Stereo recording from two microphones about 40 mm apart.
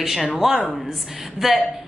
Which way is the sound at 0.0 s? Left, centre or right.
Centre.